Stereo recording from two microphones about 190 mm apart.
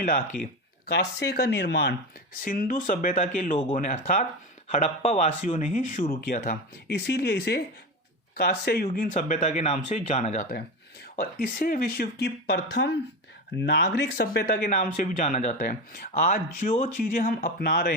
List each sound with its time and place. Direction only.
0.9 s speech: 60° left (ahead or behind)
2.4 s speech: 45° left (ahead or behind)